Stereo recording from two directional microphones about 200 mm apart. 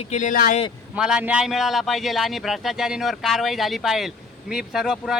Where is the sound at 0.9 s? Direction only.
5° right (ahead or behind).